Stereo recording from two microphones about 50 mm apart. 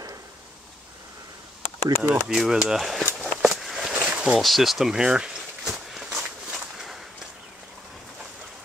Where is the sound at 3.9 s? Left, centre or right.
Right.